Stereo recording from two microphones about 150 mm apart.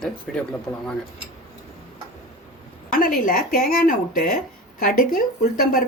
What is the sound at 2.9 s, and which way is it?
A woman's voice, 70° left (ahead or behind).